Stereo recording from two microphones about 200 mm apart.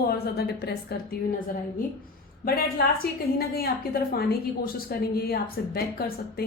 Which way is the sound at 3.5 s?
50° left (ahead or behind).